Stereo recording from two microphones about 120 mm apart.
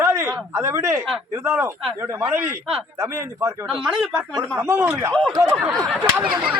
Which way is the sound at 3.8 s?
5° right (ahead or behind).